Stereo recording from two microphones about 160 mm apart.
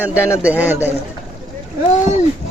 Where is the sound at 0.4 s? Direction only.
10° right (ahead or behind).